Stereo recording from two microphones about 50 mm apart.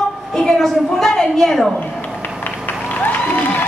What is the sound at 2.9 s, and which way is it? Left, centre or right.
Applause, left.